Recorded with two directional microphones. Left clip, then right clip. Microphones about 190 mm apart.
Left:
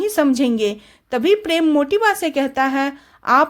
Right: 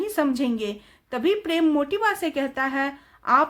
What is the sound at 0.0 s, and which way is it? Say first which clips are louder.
Speech: left 7 dB; 40° left (ahead or behind).